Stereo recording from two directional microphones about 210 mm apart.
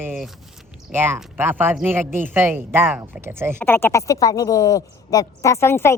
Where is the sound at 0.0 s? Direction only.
5° right (ahead or behind).